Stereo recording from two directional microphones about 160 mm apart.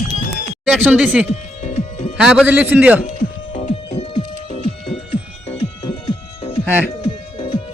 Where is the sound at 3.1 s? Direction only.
50° left (ahead or behind).